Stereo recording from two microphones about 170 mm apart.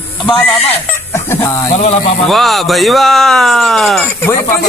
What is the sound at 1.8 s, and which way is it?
Speech, 40° left (ahead or behind).